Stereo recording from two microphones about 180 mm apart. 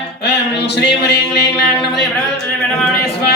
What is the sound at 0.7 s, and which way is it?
Music, 70° left (ahead or behind).